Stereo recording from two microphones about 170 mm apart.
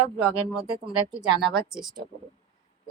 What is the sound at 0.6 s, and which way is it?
Speech, 30° right (ahead or behind).